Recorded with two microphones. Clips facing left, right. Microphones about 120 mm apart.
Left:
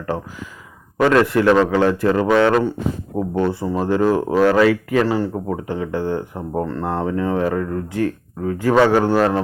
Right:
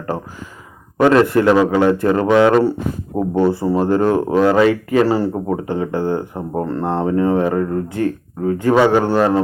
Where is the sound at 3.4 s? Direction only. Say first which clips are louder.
Right 5 dB; 5° right (ahead or behind).